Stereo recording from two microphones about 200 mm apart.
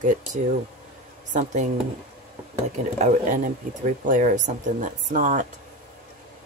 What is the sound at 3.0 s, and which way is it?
Speech, 40° right (ahead or behind).